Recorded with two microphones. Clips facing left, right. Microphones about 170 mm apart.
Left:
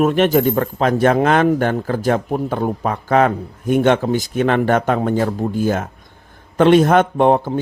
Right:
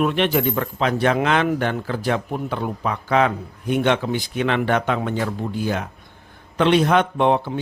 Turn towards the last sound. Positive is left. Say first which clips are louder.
# left 4 dB
turn(degrees=45)  # may be behind; listen again after turning